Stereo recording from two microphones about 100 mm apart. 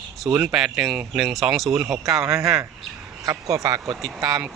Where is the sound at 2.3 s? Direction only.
30° right (ahead or behind).